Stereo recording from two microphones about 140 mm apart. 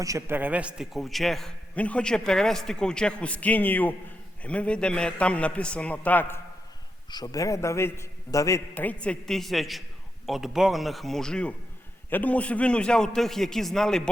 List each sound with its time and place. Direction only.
0.0 s a man's voice: 20° right (ahead or behind); by 6.4 s 15° left (ahead or behind)
7.1 s a man's voice: 25° left (ahead or behind); by 14.1 s 5° left (ahead or behind)